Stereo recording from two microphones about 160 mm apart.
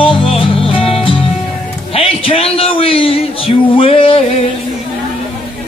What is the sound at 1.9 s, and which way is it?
Speech, 35° left (ahead or behind).